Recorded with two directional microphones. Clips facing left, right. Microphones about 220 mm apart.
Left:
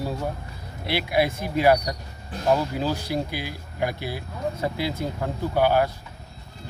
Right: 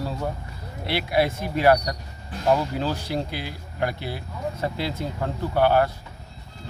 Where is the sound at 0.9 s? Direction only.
15° left (ahead or behind).